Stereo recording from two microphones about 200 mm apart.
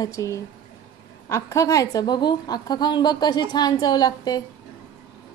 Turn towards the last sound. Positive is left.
turn(degrees=20)  # may be behind; listen again after turning